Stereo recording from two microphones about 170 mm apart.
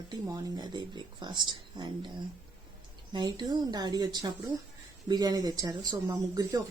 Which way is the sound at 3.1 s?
25° right (ahead or behind).